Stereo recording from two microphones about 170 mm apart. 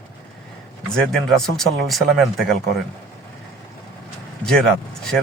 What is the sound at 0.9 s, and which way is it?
Speech, centre (ahead or behind).